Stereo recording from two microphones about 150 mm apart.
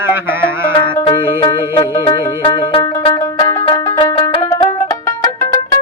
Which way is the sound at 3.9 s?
30° left (ahead or behind).